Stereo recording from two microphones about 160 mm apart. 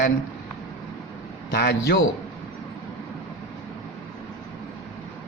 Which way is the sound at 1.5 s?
85° left.